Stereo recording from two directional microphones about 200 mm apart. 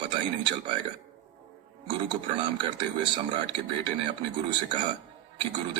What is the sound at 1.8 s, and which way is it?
Speech, 25° right (ahead or behind).